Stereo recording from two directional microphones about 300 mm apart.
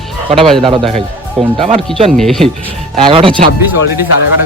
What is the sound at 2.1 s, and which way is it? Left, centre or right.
Speech, centre.